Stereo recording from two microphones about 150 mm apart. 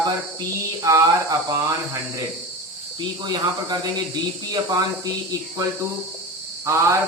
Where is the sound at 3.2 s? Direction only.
30° right (ahead or behind).